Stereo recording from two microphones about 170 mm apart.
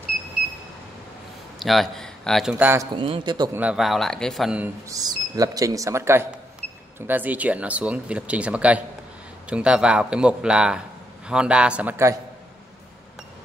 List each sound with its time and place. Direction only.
1.6 s speech: centre (ahead or behind)
2.5 s speech: 10° right (ahead or behind)
3.0 s speech: 30° right (ahead or behind)
3.5 s speech: 5° right (ahead or behind)
4.8 s speech: 20° right (ahead or behind)